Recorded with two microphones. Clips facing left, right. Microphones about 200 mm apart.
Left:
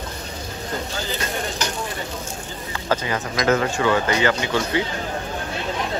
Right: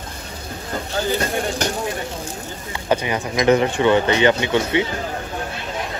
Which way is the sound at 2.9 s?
20° right (ahead or behind).